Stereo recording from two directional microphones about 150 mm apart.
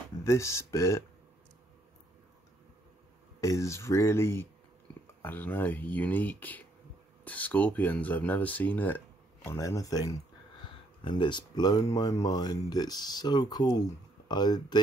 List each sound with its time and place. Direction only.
0.2 s speech: 20° left (ahead or behind)
3.3 s speech: 20° left (ahead or behind)
11.1 s speech: 30° left (ahead or behind)